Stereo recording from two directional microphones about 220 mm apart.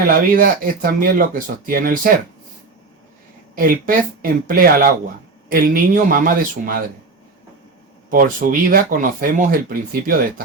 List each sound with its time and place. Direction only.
0.1 s speech: 40° right (ahead or behind)
3.5 s speech: 40° right (ahead or behind)
8.1 s speech: 40° right (ahead or behind)